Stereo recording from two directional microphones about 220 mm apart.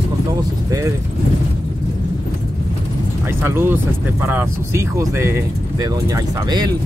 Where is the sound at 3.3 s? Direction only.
10° right (ahead or behind).